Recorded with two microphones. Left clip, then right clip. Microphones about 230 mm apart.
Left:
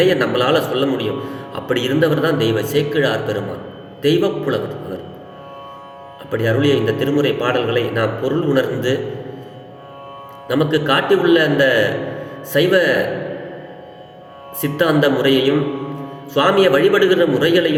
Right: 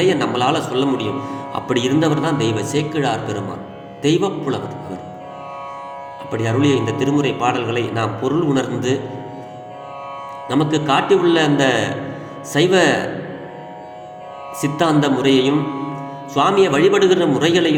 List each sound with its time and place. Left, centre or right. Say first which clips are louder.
0.0 s a man's voice: left 2 dB; right
6.3 s a man's voice: left 2 dB; right
10.5 s a man's voice: left 1 dB; right
14.6 s a man's voice: left 2 dB; right